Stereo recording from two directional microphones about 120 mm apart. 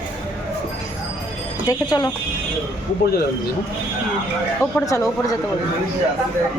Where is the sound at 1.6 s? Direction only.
35° left (ahead or behind).